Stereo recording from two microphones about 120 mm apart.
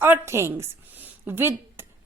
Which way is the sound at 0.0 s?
20° right (ahead or behind).